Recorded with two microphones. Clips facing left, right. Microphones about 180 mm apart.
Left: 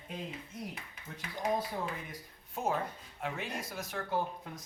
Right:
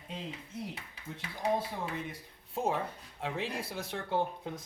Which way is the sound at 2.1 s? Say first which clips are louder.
Right 4 dB; 30° right (ahead or behind).